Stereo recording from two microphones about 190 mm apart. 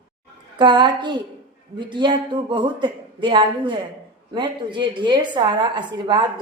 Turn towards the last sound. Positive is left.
turn(degrees=-25)  # may be behind; listen again after turning